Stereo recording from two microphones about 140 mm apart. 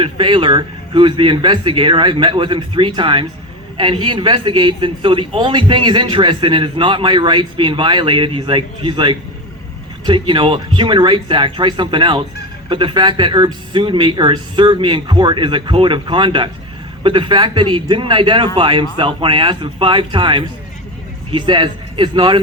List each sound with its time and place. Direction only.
0.0 s a man's voice: 35° right (ahead or behind)